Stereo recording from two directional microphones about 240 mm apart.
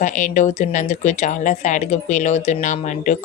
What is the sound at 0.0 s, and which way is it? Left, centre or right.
Speech, left.